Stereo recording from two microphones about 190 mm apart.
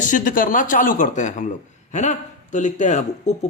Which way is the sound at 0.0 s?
40° left (ahead or behind).